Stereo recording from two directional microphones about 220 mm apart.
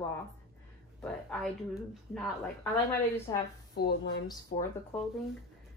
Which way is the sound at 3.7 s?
45° left (ahead or behind).